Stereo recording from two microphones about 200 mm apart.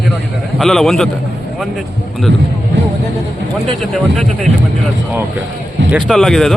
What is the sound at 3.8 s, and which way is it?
Speech, centre (ahead or behind).